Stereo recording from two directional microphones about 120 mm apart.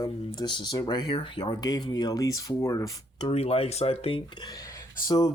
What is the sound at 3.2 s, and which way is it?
Speech, 55° left (ahead or behind).